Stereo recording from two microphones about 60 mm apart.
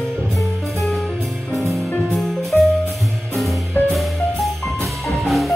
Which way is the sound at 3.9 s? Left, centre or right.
Centre.